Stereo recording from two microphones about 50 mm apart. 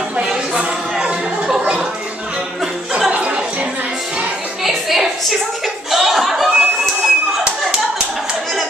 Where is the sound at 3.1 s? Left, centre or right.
Right.